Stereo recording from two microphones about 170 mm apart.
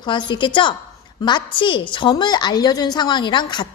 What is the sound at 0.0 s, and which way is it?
A woman's voice, 25° left (ahead or behind).